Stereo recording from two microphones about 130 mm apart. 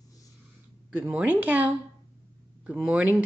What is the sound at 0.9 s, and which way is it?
Speech, 15° right (ahead or behind).